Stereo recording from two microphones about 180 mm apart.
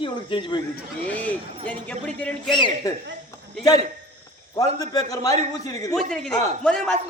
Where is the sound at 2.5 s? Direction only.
25° left (ahead or behind).